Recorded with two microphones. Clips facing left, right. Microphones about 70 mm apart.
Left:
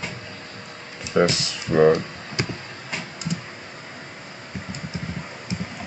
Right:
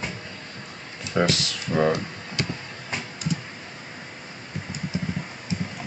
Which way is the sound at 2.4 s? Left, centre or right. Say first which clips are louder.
Left 1 dB; left.